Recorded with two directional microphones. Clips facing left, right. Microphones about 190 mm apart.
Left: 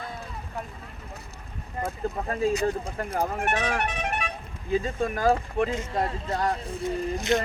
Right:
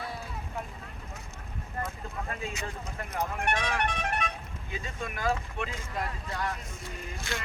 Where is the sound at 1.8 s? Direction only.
15° left (ahead or behind).